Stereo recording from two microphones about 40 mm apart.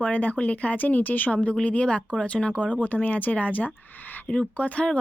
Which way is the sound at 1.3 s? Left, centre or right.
Left.